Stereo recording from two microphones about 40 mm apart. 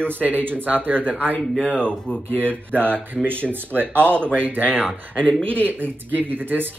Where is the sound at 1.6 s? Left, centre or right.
Left.